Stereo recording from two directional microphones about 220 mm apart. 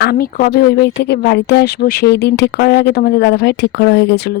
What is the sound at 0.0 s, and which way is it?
Speech, 45° left (ahead or behind).